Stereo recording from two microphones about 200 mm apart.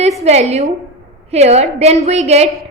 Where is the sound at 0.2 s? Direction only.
35° right (ahead or behind).